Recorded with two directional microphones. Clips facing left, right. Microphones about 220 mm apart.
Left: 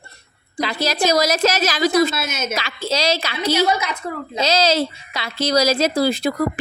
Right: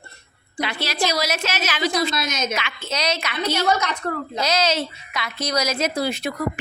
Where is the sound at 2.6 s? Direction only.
35° left (ahead or behind).